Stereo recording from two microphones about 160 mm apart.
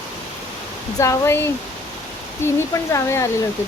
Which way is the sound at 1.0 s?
15° left (ahead or behind).